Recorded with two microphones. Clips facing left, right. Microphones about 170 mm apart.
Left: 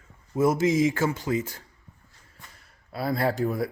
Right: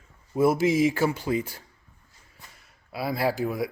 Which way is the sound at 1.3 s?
20° right (ahead or behind).